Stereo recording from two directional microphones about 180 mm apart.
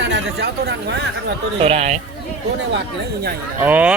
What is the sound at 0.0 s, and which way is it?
Speech, 75° right (ahead or behind).